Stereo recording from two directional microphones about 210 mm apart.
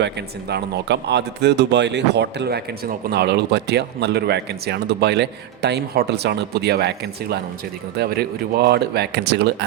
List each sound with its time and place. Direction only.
0.0 s speech: 55° right (ahead or behind)